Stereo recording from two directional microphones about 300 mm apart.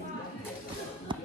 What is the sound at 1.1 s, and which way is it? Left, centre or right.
Music, centre.